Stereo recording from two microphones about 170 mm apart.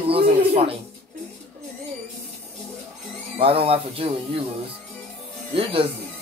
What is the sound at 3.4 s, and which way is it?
A man's voice, 35° right (ahead or behind).